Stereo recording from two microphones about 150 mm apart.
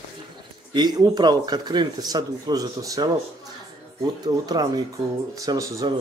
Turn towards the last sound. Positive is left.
turn(degrees=-25)  # may be behind; listen again after turning